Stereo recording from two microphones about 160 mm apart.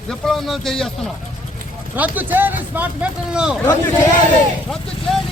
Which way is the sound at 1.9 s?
10° right (ahead or behind).